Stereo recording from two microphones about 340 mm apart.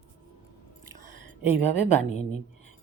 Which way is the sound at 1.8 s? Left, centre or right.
Centre.